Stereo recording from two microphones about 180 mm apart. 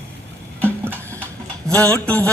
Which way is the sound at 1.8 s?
5° left (ahead or behind).